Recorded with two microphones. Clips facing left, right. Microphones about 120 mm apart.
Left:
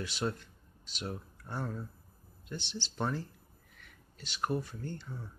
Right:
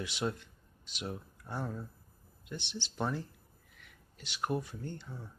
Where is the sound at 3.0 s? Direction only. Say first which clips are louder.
Even; 5° right (ahead or behind).